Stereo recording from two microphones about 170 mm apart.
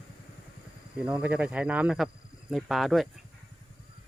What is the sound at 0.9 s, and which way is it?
Speech, 10° right (ahead or behind).